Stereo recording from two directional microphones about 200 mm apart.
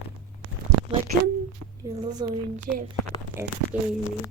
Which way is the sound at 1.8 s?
20° right (ahead or behind).